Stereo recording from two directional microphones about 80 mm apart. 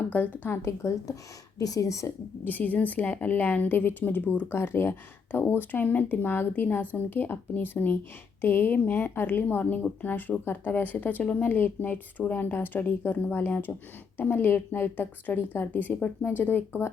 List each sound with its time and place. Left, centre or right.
0.4 s speech: left
1.5 s speech: left
2.4 s a woman's voice: left